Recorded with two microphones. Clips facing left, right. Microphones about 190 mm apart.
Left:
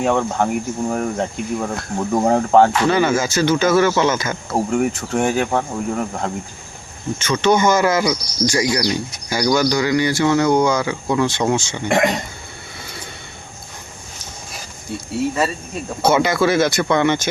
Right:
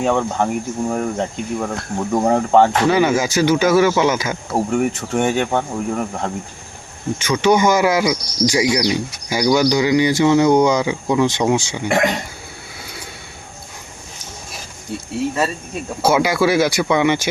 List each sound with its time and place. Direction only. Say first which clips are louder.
0.0 s speech: even; centre (ahead or behind)
2.9 s speech: right 1 dB; 15° right (ahead or behind)
4.5 s speech: even; centre (ahead or behind)
7.2 s speech: right 1 dB; 15° right (ahead or behind)
16.0 s speech: even; 10° right (ahead or behind)